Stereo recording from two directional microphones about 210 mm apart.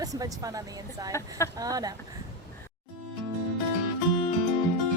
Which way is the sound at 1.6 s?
15° right (ahead or behind).